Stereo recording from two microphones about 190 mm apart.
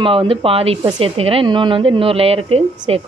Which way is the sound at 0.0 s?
30° right (ahead or behind).